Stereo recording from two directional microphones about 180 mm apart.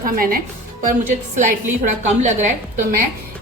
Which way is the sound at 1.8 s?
40° right (ahead or behind).